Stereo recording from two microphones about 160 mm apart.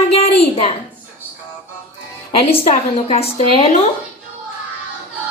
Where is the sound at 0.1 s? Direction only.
40° left (ahead or behind).